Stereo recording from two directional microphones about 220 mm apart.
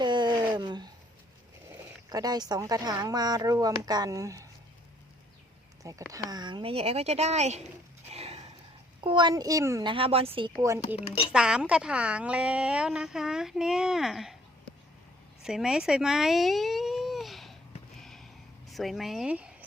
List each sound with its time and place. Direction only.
0.0 s a sound: 20° right (ahead or behind)
2.0 s speech: 15° right (ahead or behind)
5.8 s speech: 15° right (ahead or behind)
8.1 s a sound: 30° right (ahead or behind)
9.0 s speech: 20° right (ahead or behind)
10.8 s speech: 25° left (ahead or behind)
11.3 s a woman's voice: 5° right (ahead or behind)
17.9 s a sound: centre (ahead or behind)
18.7 s a woman's voice: centre (ahead or behind)